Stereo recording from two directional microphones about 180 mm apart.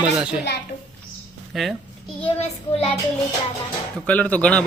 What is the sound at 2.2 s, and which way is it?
Child singing, 35° left (ahead or behind).